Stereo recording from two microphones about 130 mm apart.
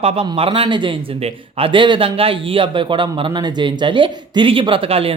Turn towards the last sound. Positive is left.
turn(degrees=-45)  # may be behind; listen again after turning